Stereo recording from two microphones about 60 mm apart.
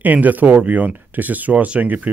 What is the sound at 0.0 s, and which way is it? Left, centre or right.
Speech, right.